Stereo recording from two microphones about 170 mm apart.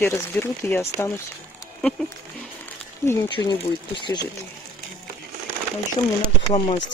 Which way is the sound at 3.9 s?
25° left (ahead or behind).